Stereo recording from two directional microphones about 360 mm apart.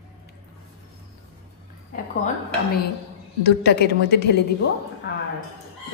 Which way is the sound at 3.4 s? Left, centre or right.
Left.